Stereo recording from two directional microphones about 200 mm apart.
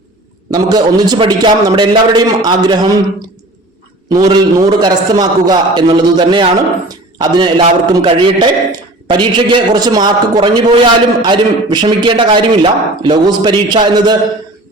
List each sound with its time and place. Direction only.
0.5 s a man's voice: 20° right (ahead or behind)
4.1 s a man's voice: 20° right (ahead or behind)